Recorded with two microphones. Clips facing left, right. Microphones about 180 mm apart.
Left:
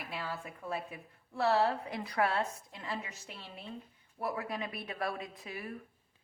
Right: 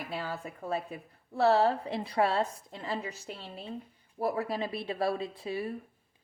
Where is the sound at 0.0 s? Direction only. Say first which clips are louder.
Right 4 dB; 40° right (ahead or behind).